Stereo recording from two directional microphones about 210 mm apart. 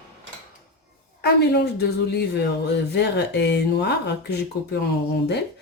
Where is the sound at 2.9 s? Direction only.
55° left (ahead or behind).